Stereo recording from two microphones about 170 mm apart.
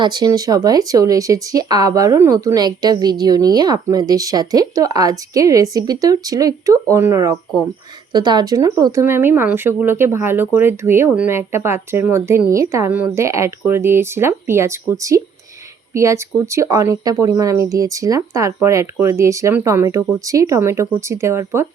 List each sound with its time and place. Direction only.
0.0 s speech: 25° right (ahead or behind)